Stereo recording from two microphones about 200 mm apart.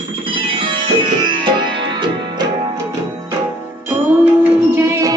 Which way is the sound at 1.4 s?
25° right (ahead or behind).